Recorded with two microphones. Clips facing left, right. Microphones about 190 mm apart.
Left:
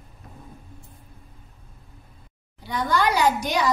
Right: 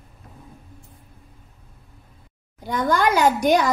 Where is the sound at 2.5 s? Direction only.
45° right (ahead or behind).